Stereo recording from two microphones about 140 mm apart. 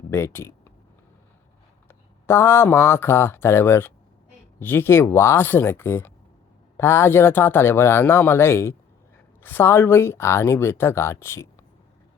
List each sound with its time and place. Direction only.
0.1 s speech: 20° left (ahead or behind)
1.9 s speech: 20° left (ahead or behind)